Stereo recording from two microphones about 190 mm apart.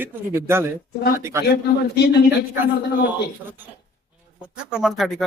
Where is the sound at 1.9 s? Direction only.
60° left (ahead or behind).